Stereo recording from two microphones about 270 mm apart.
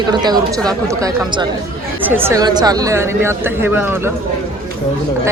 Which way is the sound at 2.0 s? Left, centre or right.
Centre.